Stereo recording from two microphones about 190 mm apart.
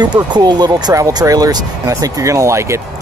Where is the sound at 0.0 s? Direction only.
20° right (ahead or behind).